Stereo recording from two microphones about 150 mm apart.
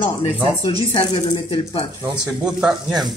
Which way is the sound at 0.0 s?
35° left (ahead or behind).